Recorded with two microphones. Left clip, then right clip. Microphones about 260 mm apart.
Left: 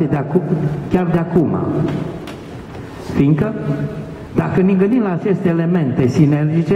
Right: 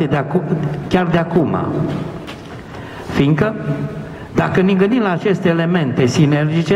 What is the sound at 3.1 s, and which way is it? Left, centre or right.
A man's voice, centre.